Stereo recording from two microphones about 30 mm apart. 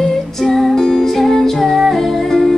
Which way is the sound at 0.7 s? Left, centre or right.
Centre.